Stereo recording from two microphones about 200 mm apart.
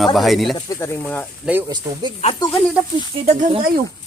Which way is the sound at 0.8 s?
10° left (ahead or behind).